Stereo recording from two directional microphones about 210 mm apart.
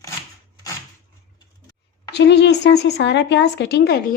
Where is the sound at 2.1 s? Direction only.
55° left (ahead or behind).